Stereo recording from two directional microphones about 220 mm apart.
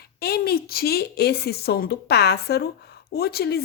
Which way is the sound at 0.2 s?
45° left (ahead or behind).